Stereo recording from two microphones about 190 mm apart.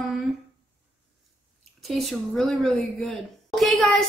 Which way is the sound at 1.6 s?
Centre (ahead or behind).